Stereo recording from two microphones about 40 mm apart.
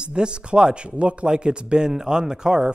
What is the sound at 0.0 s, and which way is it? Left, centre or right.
A man's voice, right.